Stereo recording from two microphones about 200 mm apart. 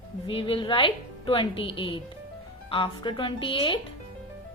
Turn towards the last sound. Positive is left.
turn(degrees=25)  # may be behind; listen again after turning